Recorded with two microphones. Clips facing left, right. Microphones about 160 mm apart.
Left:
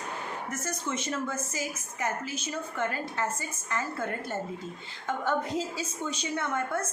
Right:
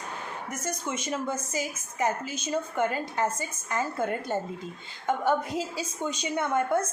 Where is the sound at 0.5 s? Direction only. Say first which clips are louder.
Right 2 dB; 15° right (ahead or behind).